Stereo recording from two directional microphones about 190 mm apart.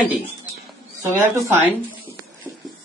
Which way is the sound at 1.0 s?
15° right (ahead or behind).